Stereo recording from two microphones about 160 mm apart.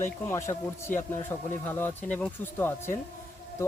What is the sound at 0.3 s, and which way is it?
Speech, 15° left (ahead or behind).